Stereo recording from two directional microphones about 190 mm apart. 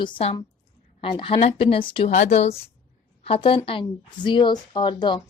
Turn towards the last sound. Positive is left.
turn(degrees=25)  # may be behind; listen again after turning